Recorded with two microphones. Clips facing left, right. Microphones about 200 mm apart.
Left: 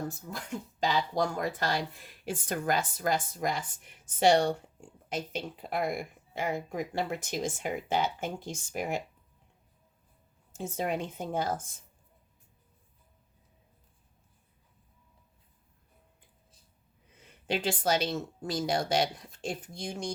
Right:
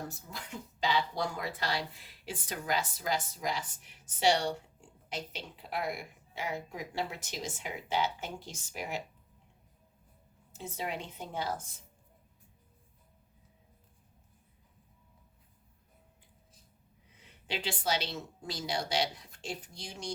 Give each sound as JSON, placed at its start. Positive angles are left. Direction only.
{"t": 0.1, "sound": "speech", "side_deg": 50}
{"t": 10.5, "sound": "speech", "side_deg": 45}
{"t": 17.4, "sound": "speech", "side_deg": 50}